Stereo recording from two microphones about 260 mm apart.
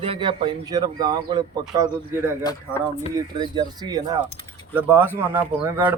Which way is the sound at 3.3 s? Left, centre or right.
Centre.